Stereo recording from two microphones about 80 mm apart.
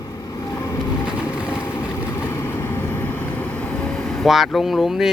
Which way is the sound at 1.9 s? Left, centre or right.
Left.